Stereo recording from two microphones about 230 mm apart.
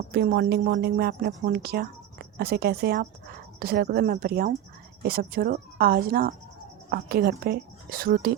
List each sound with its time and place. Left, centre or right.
0.1 s speech: right